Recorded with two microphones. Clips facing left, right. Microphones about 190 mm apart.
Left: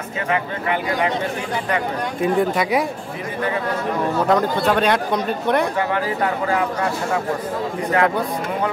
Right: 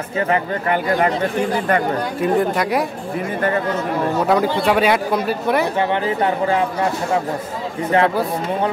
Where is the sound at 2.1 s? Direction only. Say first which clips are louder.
Even; centre (ahead or behind).